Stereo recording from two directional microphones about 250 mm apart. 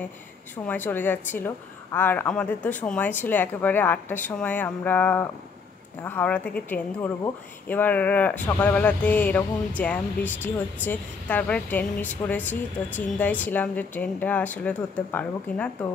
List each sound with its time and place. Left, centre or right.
0.7 s a woman's voice: centre